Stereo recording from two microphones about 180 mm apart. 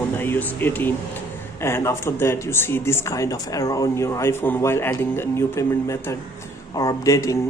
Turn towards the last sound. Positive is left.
turn(degrees=15)  # may be behind; listen again after turning